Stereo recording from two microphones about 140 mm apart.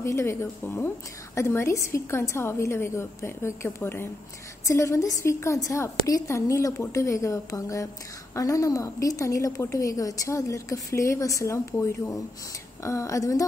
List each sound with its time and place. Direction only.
0.0 s a woman's voice: 20° left (ahead or behind)